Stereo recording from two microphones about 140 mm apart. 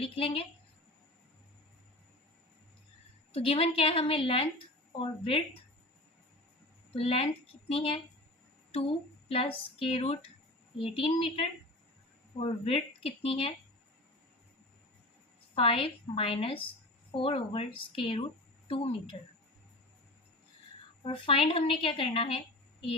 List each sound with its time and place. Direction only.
0.0 s a woman's voice: 40° left (ahead or behind)
3.3 s a woman's voice: 40° left (ahead or behind)
6.9 s speech: 45° left (ahead or behind)
9.3 s a woman's voice: 40° left (ahead or behind)
15.5 s a woman's voice: 40° left (ahead or behind)
21.0 s a woman's voice: 40° left (ahead or behind)